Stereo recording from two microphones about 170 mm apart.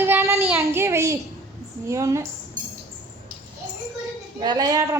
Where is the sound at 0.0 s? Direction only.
15° right (ahead or behind).